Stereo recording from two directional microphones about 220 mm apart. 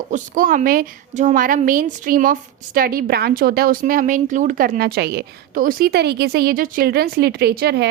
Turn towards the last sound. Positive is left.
turn(degrees=-50)  # may be behind; listen again after turning